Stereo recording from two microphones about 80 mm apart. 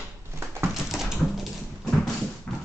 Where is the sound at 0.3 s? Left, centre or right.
Right.